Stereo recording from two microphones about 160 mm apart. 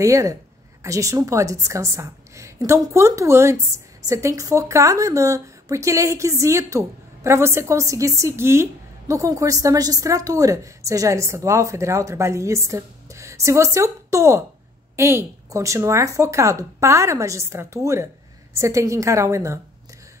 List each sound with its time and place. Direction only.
0.0 s a woman's voice: 20° right (ahead or behind)